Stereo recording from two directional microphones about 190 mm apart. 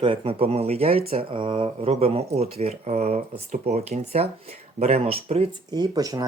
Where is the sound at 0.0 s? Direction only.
30° right (ahead or behind).